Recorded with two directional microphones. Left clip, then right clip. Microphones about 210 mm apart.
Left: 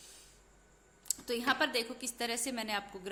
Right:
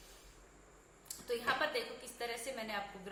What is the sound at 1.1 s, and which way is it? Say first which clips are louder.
A woman's voice: left 4 dB; 50° left (ahead or behind).